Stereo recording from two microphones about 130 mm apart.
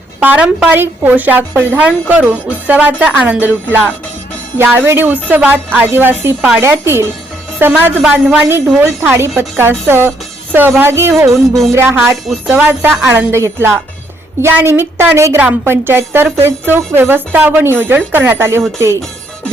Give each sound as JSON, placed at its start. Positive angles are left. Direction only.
{"t": 0.2, "sound": "a woman's voice", "side_deg": -10}
{"t": 11.3, "sound": "music", "side_deg": 0}
{"t": 11.7, "sound": "a woman's voice", "side_deg": -20}
{"t": 13.1, "sound": "a woman's voice", "side_deg": -20}